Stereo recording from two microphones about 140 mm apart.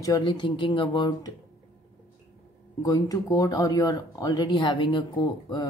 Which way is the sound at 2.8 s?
25° left (ahead or behind).